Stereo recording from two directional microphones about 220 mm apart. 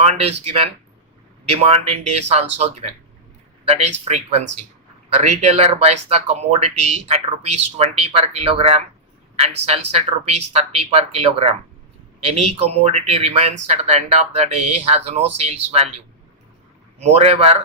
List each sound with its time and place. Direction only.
0.0 s speech: 30° right (ahead or behind)
4.1 s speech: 30° right (ahead or behind)
17.0 s speech: 30° right (ahead or behind)